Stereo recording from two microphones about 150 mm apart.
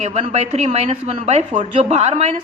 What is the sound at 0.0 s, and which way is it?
A woman's voice, 45° right (ahead or behind).